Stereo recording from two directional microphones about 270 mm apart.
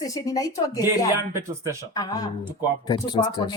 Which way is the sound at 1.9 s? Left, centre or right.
Centre.